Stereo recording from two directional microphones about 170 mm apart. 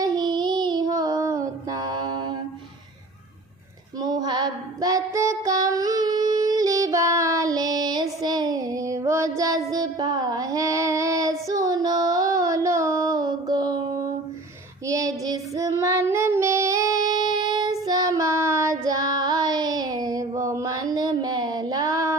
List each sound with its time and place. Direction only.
0.0 s child singing: 25° right (ahead or behind)
4.0 s female singing: 25° right (ahead or behind)
9.7 s child singing: 25° right (ahead or behind)